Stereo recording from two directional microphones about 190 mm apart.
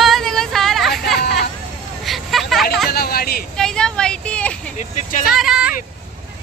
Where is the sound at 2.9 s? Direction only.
55° left (ahead or behind).